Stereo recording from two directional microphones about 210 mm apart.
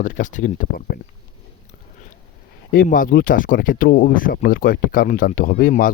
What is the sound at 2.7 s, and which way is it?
Speech, 40° left (ahead or behind).